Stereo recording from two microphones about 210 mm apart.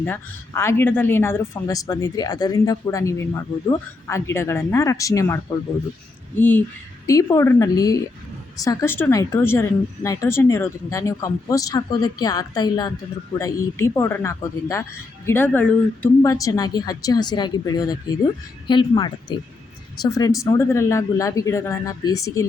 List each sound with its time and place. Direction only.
0.0 s a woman's voice: 10° left (ahead or behind)